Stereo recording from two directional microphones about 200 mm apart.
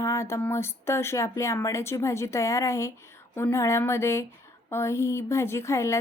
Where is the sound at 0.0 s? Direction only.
15° left (ahead or behind).